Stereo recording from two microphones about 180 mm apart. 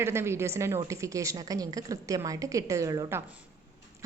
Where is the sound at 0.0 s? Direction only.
15° right (ahead or behind).